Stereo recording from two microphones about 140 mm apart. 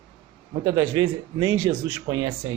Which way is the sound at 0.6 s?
25° right (ahead or behind).